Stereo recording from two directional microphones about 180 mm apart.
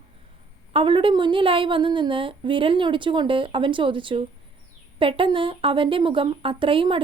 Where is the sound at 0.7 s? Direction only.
30° right (ahead or behind).